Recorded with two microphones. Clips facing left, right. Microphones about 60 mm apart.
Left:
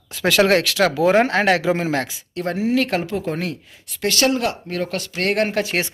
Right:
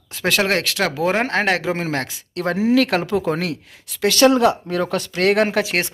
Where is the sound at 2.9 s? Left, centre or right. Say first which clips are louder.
Right 3 dB; right.